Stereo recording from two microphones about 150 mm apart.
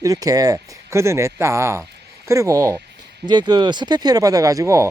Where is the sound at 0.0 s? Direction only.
25° right (ahead or behind).